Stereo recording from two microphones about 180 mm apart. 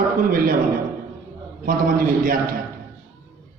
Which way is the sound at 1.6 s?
50° right (ahead or behind).